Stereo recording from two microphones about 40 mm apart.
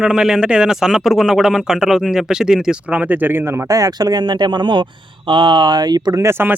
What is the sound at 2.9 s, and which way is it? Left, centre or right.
Speech, right.